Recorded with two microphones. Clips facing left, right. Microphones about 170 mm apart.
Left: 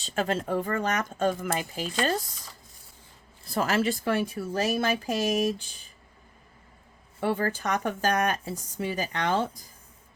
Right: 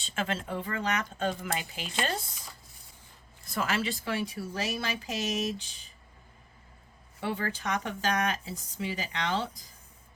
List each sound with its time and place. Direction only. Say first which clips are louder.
0.0 s speech: left 5 dB; 40° left (ahead or behind)
3.4 s speech: left 5 dB; 40° left (ahead or behind)
7.2 s speech: left 6 dB; 45° left (ahead or behind)